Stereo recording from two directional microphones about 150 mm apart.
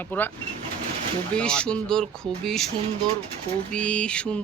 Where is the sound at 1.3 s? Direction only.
5° left (ahead or behind).